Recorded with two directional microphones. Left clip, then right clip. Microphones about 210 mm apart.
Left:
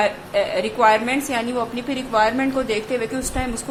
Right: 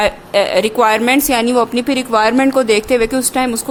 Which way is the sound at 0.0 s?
55° right (ahead or behind).